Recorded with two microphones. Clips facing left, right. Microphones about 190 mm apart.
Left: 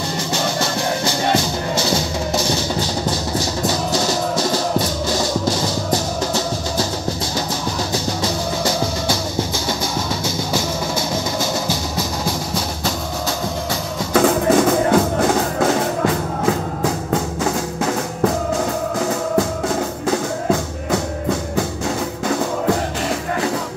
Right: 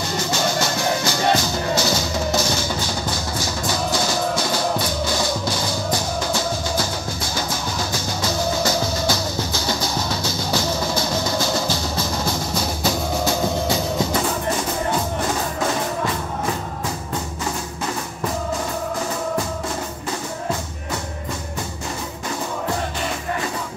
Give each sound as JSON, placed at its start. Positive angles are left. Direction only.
{"t": 1.9, "sound": "music", "side_deg": 30}
{"t": 5.3, "sound": "music", "side_deg": 40}
{"t": 8.6, "sound": "music", "side_deg": 25}
{"t": 10.2, "sound": "music", "side_deg": 25}
{"t": 14.1, "sound": "music", "side_deg": 90}
{"t": 20.9, "sound": "music", "side_deg": 90}